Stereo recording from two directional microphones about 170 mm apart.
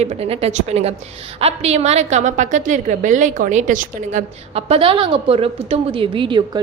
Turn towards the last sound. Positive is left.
turn(degrees=-30)  # may be behind; listen again after turning